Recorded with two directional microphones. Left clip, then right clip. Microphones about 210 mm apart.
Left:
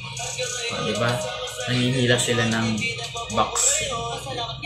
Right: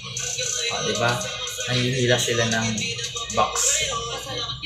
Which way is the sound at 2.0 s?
Centre (ahead or behind).